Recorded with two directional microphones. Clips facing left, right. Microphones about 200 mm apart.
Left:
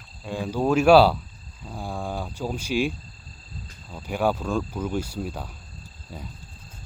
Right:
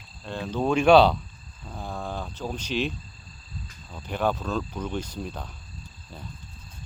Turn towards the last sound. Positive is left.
turn(degrees=10)  # may be behind; listen again after turning